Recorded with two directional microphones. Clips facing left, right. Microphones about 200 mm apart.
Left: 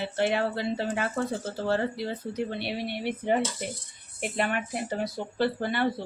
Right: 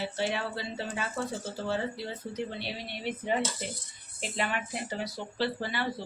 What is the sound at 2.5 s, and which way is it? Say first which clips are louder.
Speech: left 6 dB; 60° left (ahead or behind).